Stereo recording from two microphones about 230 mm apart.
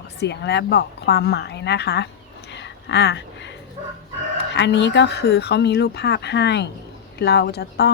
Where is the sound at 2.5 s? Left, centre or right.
Left.